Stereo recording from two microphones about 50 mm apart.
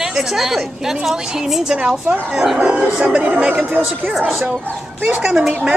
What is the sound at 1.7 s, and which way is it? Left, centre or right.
A woman's voice, centre.